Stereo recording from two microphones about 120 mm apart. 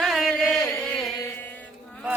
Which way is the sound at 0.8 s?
5° left (ahead or behind).